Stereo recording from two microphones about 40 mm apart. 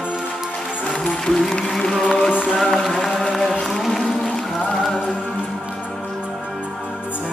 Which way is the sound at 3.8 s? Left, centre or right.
Centre.